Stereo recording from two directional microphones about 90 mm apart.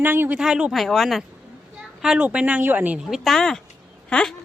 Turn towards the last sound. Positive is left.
turn(degrees=10)  # may be behind; listen again after turning